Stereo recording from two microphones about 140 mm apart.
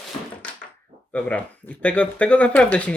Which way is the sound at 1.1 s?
10° left (ahead or behind).